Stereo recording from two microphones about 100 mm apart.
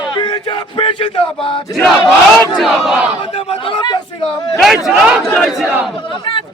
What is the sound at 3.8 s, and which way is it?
Chatter, 45° left (ahead or behind).